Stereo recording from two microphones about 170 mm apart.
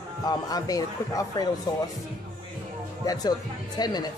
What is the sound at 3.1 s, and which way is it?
Speech, 25° left (ahead or behind).